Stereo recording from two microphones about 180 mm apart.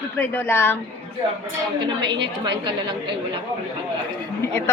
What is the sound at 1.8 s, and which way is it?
A woman's voice, 25° right (ahead or behind).